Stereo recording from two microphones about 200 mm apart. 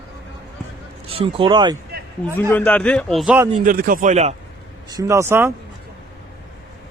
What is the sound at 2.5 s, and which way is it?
Speech, 5° left (ahead or behind).